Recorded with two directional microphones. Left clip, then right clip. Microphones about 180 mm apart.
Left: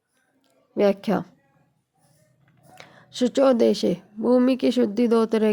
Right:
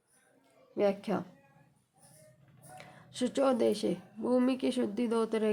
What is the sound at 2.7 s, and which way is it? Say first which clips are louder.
Speech: left 10 dB; 35° left (ahead or behind).